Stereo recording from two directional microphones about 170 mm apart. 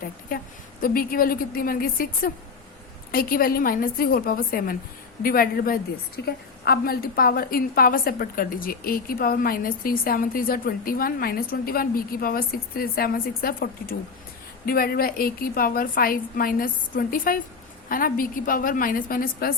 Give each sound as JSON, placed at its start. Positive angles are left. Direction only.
{"t": 0.8, "sound": "a woman's voice", "side_deg": 60}